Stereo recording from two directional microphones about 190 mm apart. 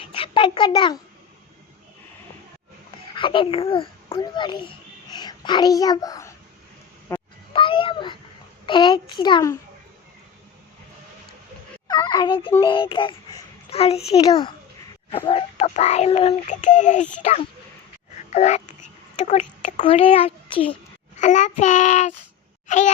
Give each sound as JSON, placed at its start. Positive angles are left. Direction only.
{"t": 0.1, "sound": "a child's voice", "side_deg": 25}
{"t": 3.2, "sound": "a child's voice", "side_deg": 25}
{"t": 7.1, "sound": "honk", "side_deg": 15}
{"t": 7.5, "sound": "cat", "side_deg": 25}
{"t": 8.6, "sound": "a child's voice", "side_deg": 25}
{"t": 11.9, "sound": "a child's voice", "side_deg": 20}
{"t": 15.3, "sound": "child singing", "side_deg": 30}
{"t": 18.3, "sound": "babbling", "side_deg": 35}
{"t": 19.2, "sound": "child singing", "side_deg": 35}
{"t": 21.2, "sound": "child singing", "side_deg": 40}
{"t": 22.6, "sound": "a sound", "side_deg": 40}